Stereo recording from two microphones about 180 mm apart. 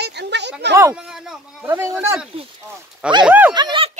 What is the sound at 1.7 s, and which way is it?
Speech, 15° right (ahead or behind).